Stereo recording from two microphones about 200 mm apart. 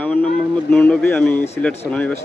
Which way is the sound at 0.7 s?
5° left (ahead or behind).